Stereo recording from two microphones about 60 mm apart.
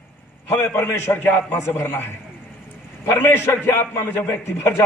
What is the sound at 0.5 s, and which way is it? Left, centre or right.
A man's voice, left.